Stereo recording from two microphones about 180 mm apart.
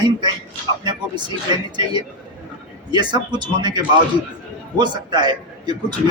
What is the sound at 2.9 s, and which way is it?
A man's voice, 25° right (ahead or behind).